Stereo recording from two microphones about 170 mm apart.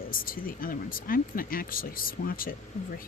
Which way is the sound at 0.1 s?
55° left (ahead or behind).